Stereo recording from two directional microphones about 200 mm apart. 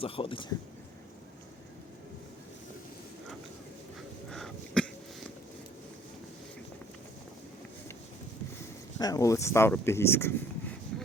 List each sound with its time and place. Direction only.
0.0 s a man's voice: 25° left (ahead or behind)
4.3 s throat clearing: centre (ahead or behind)
9.0 s speech: 20° left (ahead or behind)